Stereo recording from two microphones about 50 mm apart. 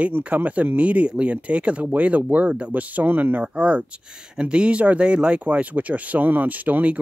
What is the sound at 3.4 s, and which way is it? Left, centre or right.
Speech, right.